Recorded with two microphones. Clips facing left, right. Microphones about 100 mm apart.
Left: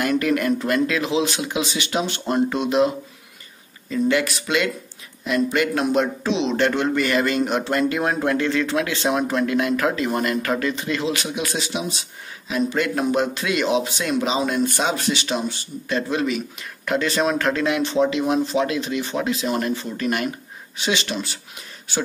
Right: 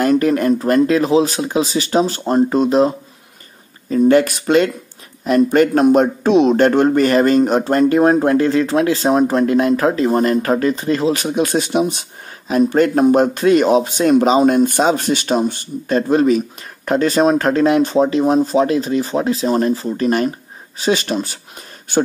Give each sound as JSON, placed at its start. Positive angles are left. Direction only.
{"t": 0.0, "sound": "speech", "side_deg": -35}
{"t": 3.9, "sound": "speech", "side_deg": -45}